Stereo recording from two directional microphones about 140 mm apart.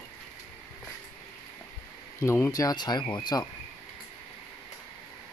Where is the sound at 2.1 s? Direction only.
20° left (ahead or behind).